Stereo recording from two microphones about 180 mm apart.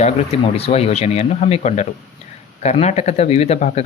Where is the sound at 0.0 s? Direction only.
35° left (ahead or behind).